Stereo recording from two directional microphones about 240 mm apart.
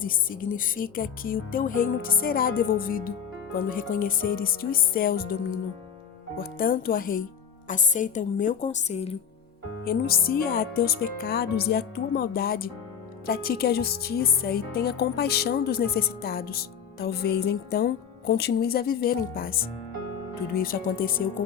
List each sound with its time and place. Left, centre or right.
0.0 s speech: left
9.8 s speech: left